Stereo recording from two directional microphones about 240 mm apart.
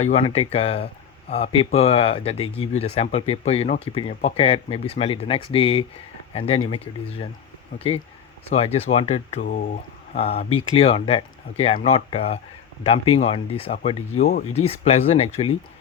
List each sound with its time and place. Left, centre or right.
0.0 s speech: left
8.4 s speech: left